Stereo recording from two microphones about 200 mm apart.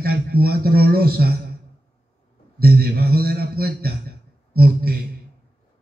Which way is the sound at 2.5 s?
50° right (ahead or behind).